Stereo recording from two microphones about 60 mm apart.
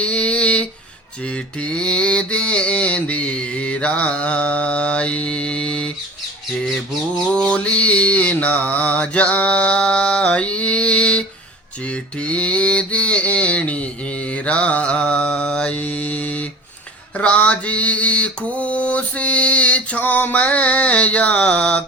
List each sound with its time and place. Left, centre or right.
0.0 s a sound: left
1.2 s mantra: left
7.3 s mantra: centre